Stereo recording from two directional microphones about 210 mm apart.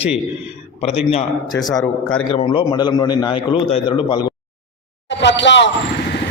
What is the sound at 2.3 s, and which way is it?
A man's voice, 25° left (ahead or behind).